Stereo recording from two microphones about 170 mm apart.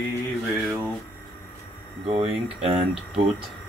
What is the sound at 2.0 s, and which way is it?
Speech, 35° right (ahead or behind).